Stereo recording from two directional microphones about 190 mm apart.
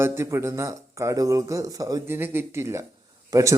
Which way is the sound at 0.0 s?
15° right (ahead or behind).